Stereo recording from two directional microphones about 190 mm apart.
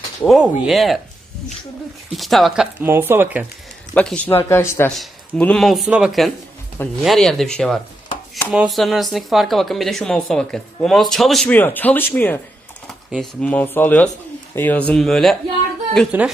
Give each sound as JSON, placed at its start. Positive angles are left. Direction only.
{"t": 0.3, "sound": "speech", "side_deg": 0}
{"t": 2.1, "sound": "speech", "side_deg": 0}
{"t": 2.8, "sound": "speech", "side_deg": -10}
{"t": 3.9, "sound": "speech", "side_deg": 5}